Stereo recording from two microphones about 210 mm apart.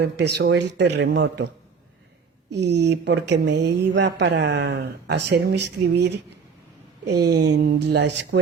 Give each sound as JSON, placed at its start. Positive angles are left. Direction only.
{"t": 0.0, "sound": "speech", "side_deg": -50}
{"t": 2.6, "sound": "speech", "side_deg": -55}